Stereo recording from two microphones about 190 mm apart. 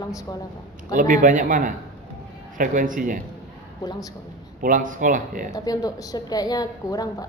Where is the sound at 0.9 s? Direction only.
45° right (ahead or behind).